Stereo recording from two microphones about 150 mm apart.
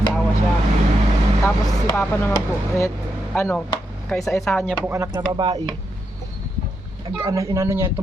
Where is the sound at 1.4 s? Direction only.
15° left (ahead or behind).